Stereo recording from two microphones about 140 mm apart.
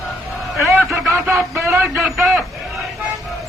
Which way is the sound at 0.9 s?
20° right (ahead or behind).